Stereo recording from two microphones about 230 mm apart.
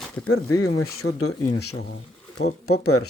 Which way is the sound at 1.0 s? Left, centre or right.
Left.